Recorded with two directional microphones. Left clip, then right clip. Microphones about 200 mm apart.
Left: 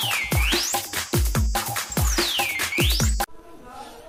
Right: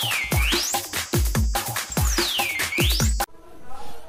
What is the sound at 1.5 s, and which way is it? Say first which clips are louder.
Music: left 1 dB; centre (ahead or behind).